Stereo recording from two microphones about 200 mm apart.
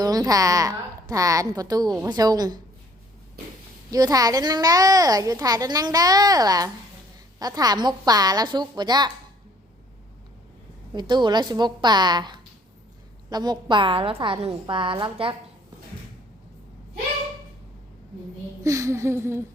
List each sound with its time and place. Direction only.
0.0 s a woman's voice: 20° right (ahead or behind)
3.9 s a woman's voice: 15° right (ahead or behind)
11.1 s a woman's voice: 20° right (ahead or behind)
18.6 s a woman's voice: 15° right (ahead or behind)